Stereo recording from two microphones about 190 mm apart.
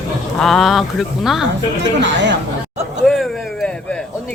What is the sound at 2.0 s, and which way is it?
Speech, 70° right (ahead or behind).